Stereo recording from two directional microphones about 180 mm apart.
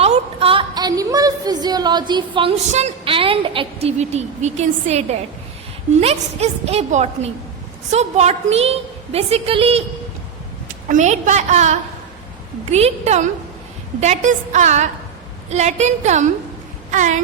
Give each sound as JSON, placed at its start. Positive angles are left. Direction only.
{"t": 0.0, "sound": "a woman's voice", "side_deg": -35}
{"t": 10.8, "sound": "a woman's voice", "side_deg": -40}